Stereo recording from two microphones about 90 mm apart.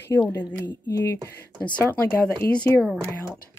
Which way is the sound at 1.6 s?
15° left (ahead or behind).